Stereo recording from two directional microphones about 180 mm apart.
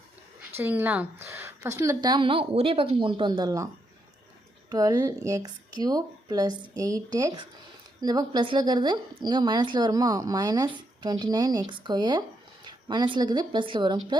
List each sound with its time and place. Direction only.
0.5 s speech: 10° right (ahead or behind)
4.7 s speech: 20° right (ahead or behind)